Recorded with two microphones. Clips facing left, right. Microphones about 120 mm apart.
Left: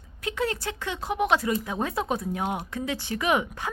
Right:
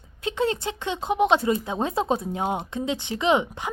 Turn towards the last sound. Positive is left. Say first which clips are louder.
# right 3 dB
turn(degrees=-20)  # may be behind; listen again after turning